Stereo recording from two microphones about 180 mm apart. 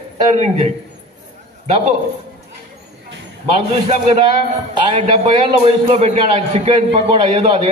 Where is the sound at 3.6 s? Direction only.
35° right (ahead or behind).